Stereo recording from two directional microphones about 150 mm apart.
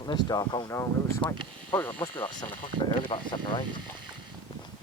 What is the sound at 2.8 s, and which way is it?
Speech, 35° left (ahead or behind).